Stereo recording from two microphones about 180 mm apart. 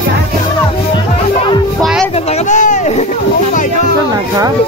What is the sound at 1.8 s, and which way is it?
Music, centre (ahead or behind).